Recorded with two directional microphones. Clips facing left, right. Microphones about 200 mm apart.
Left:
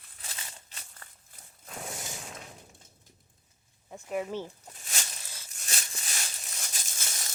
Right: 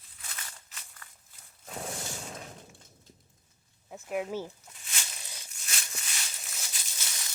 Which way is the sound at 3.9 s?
5° right (ahead or behind).